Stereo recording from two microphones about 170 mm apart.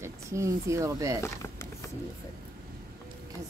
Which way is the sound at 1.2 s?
15° left (ahead or behind).